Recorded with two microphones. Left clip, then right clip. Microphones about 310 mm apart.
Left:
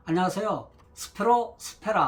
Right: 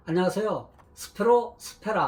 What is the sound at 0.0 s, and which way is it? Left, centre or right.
Speech, centre.